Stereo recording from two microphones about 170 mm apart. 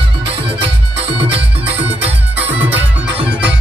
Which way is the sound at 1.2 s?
35° right (ahead or behind).